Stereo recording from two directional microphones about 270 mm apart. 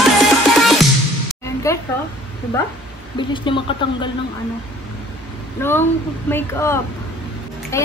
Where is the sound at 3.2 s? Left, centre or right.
Centre.